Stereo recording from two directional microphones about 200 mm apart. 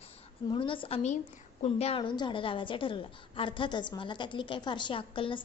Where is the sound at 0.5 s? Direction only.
25° left (ahead or behind).